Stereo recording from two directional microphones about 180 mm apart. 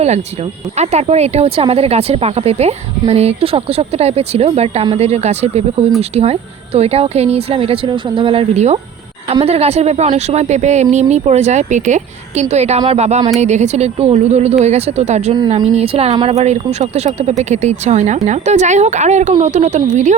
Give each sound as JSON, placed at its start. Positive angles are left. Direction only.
{"t": 0.8, "sound": "speech", "side_deg": -35}